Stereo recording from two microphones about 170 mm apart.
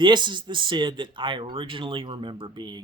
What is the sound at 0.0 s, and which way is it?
Speech, 25° right (ahead or behind).